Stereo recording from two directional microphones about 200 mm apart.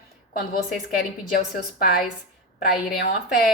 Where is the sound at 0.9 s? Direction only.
50° left (ahead or behind).